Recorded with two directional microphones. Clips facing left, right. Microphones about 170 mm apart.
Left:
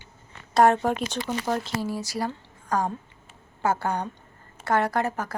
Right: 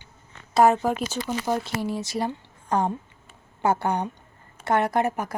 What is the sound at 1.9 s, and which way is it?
A woman's voice, 20° right (ahead or behind).